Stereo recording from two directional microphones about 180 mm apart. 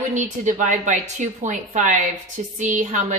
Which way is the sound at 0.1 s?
45° right (ahead or behind).